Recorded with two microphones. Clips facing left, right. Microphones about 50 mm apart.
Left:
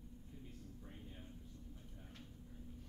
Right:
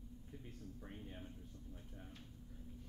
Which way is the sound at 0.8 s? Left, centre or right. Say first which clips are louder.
Right 3 dB; right.